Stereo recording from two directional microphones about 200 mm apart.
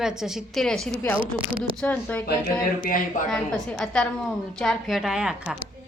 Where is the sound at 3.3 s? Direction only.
5° left (ahead or behind).